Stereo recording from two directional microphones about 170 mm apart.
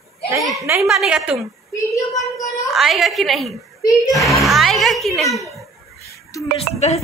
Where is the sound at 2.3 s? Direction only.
20° left (ahead or behind).